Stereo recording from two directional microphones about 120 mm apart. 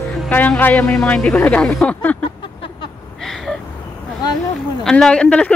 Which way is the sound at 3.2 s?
5° left (ahead or behind).